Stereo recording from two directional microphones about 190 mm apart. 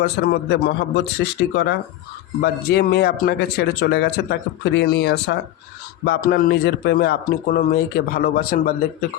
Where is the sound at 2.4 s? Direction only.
60° left (ahead or behind).